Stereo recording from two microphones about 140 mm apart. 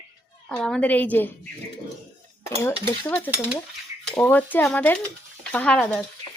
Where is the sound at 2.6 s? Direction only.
15° left (ahead or behind).